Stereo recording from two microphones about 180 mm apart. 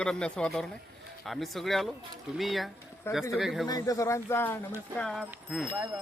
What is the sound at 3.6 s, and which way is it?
Speech, 20° left (ahead or behind).